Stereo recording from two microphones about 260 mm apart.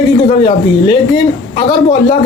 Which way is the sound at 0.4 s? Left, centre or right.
Centre.